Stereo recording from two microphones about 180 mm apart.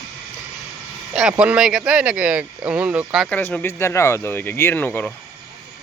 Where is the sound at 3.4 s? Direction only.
15° left (ahead or behind).